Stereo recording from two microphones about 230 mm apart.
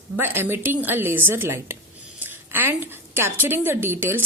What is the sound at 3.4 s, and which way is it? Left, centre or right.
Speech, centre.